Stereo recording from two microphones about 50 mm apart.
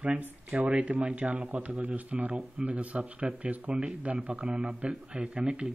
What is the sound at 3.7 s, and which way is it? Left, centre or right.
A man's voice, centre.